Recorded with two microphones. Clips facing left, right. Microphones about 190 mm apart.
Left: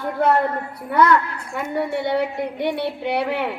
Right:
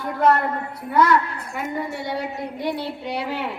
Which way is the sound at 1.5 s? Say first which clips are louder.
Left 5 dB; 60° left (ahead or behind).